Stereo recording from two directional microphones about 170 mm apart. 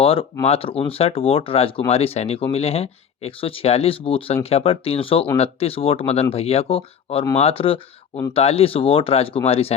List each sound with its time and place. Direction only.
0.0 s speech: 35° left (ahead or behind)